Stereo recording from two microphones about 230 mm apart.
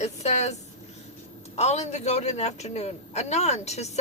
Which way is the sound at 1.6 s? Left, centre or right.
Left.